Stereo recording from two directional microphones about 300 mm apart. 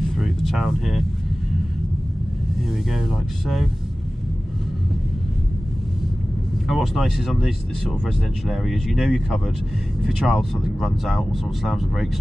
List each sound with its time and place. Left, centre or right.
0.2 s a sound: centre
2.9 s speech: centre
6.7 s speech: centre